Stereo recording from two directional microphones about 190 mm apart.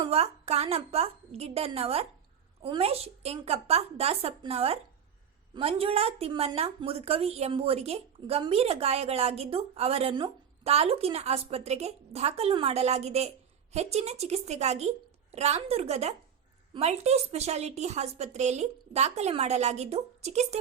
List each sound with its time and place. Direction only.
0.0 s a woman's voice: 30° right (ahead or behind)